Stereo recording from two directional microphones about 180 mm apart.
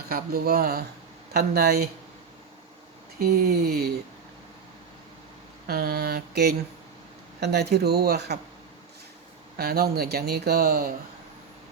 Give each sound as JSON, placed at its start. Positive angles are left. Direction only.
{"t": 0.1, "sound": "speech", "side_deg": -55}
{"t": 3.2, "sound": "speech", "side_deg": -55}
{"t": 5.6, "sound": "speech", "side_deg": -55}
{"t": 9.6, "sound": "speech", "side_deg": -60}